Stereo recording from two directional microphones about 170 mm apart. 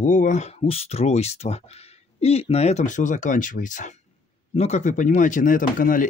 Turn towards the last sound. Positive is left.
turn(degrees=55)  # may be behind; listen again after turning